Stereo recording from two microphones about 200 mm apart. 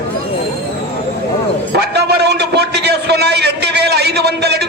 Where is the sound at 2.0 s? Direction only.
55° right (ahead or behind).